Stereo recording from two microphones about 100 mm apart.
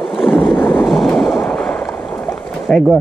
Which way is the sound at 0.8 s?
Centre (ahead or behind).